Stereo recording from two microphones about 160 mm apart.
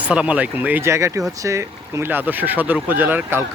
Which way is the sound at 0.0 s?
5° right (ahead or behind).